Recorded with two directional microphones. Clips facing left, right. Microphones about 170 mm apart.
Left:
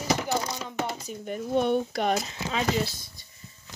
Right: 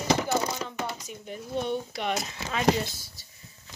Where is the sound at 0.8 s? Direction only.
30° left (ahead or behind).